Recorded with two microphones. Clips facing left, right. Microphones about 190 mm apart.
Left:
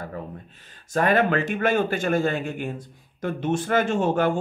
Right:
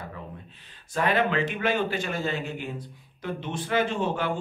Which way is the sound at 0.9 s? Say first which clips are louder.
Left 4 dB; 50° left (ahead or behind).